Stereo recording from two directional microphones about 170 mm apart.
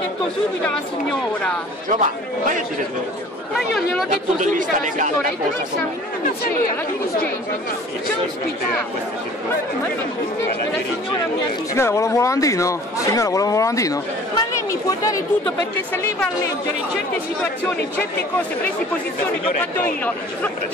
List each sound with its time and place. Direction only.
1.9 s speech: 50° right (ahead or behind)
3.5 s speech: centre (ahead or behind)
4.1 s speech: 50° right (ahead or behind)
11.7 s speech: 15° left (ahead or behind)
15.4 s speech: 10° left (ahead or behind)